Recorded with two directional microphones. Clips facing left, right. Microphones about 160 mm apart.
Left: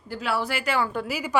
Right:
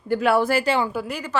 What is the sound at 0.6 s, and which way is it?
Speech, 25° right (ahead or behind).